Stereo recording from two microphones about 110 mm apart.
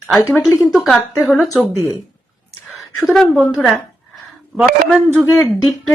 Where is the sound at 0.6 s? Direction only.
5° right (ahead or behind).